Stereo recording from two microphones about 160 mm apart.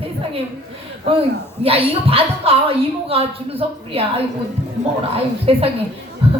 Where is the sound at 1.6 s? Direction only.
35° right (ahead or behind).